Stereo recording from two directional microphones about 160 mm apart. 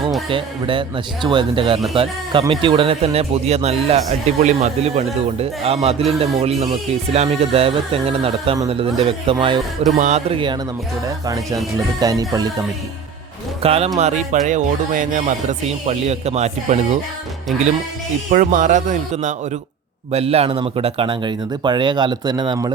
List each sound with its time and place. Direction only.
0.3 s speech: 35° right (ahead or behind)
10.0 s speech: 45° right (ahead or behind)
11.3 s a man's voice: 20° right (ahead or behind)
13.6 s speech: 40° right (ahead or behind)
18.3 s a man's voice: 55° right (ahead or behind); by 22.7 s 25° right (ahead or behind)